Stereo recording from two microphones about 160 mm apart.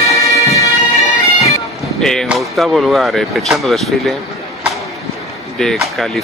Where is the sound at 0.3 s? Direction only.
20° left (ahead or behind).